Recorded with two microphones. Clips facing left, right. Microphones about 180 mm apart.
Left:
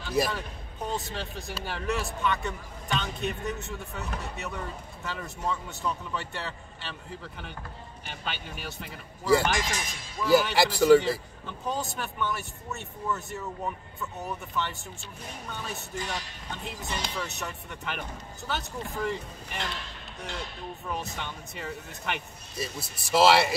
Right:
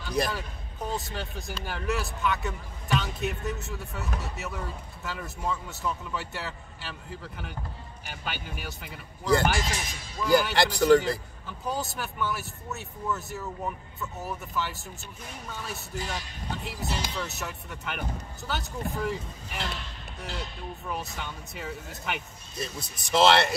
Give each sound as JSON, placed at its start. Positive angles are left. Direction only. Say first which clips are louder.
{"t": 0.0, "sound": "speech", "louder": "left 1 dB", "side_deg": 5}